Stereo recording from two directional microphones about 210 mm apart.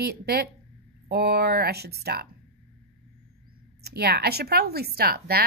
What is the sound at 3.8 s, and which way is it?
Speech, 50° right (ahead or behind).